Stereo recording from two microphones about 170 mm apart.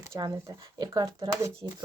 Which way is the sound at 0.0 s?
20° right (ahead or behind).